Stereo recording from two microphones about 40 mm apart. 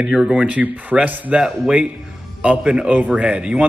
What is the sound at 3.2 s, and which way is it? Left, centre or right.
Speech, right.